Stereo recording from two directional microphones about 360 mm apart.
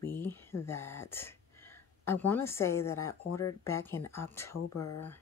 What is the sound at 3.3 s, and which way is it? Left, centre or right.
Speech, left.